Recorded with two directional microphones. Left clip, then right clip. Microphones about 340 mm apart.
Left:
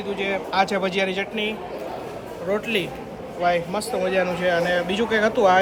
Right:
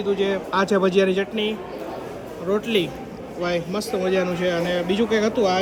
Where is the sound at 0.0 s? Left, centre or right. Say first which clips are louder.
Right 3 dB; centre.